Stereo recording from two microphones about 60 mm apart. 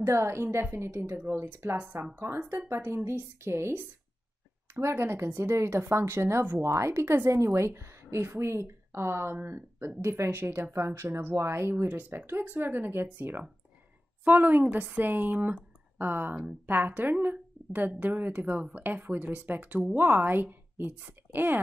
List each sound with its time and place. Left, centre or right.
0.0 s a woman's voice: right